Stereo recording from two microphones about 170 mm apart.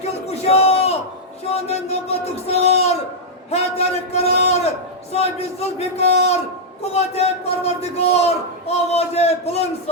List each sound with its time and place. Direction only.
0.3 s crowd: 35° left (ahead or behind)
1.6 s a man's voice: 40° left (ahead or behind)